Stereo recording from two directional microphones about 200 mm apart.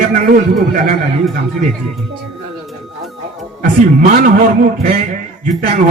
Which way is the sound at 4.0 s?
40° right (ahead or behind).